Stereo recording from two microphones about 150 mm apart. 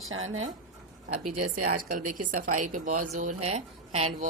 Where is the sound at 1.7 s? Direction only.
65° right (ahead or behind).